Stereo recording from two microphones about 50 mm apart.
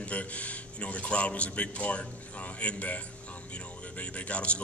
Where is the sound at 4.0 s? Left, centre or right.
Left.